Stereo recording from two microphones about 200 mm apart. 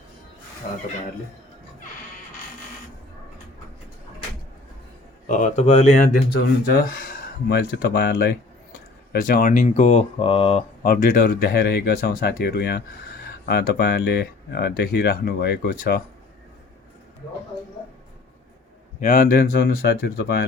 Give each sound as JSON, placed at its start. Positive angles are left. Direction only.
{"t": 5.3, "sound": "speech", "side_deg": 35}
{"t": 10.8, "sound": "speech", "side_deg": 45}
{"t": 18.9, "sound": "speech", "side_deg": 40}